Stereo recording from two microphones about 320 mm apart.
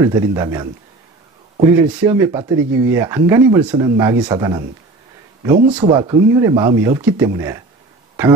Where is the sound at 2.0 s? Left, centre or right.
Centre.